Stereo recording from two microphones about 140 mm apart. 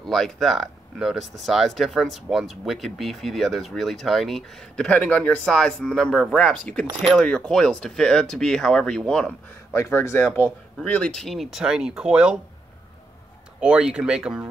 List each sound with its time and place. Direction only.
0.0 s speech: centre (ahead or behind)
9.8 s speech: 20° left (ahead or behind); by 12.4 s 5° right (ahead or behind)
13.6 s speech: 5° right (ahead or behind)